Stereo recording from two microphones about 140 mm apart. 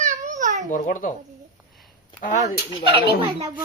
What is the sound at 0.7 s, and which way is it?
Speech, 75° left (ahead or behind).